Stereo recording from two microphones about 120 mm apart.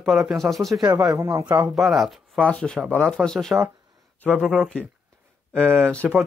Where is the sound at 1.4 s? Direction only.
15° right (ahead or behind).